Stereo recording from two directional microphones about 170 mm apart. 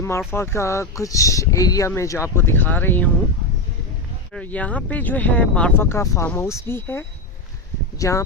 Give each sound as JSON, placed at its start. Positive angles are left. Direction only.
{"t": 0.0, "sound": "speech", "side_deg": 15}
{"t": 4.4, "sound": "speech", "side_deg": 10}